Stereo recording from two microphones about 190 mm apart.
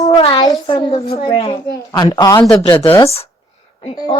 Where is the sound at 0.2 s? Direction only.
25° left (ahead or behind).